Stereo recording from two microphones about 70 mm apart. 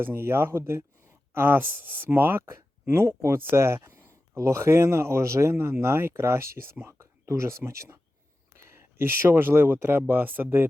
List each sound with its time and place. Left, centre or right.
0.0 s speech: right
3.1 s speech: right